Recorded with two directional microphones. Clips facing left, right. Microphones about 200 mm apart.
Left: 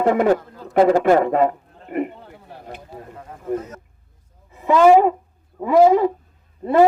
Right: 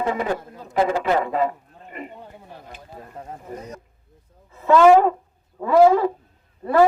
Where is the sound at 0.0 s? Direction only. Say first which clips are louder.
Left 7 dB; 60° left (ahead or behind).